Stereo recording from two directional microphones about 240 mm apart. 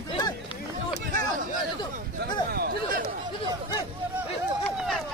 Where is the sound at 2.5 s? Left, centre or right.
Right.